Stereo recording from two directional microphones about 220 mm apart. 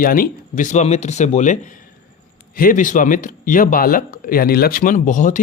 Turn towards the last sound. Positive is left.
turn(degrees=35)  # may be behind; listen again after turning